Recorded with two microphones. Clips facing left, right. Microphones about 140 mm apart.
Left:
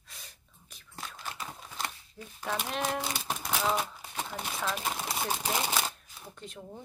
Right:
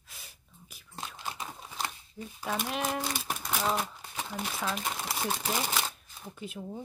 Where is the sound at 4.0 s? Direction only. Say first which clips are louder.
Even; centre (ahead or behind).